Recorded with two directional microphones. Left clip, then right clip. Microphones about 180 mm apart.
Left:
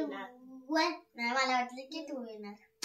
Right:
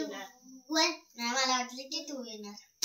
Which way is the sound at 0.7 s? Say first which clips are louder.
Right 2 dB; 20° left (ahead or behind).